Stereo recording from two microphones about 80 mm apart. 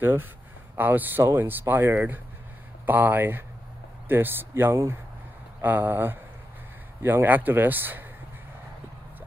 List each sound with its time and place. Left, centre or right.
0.0 s speech: right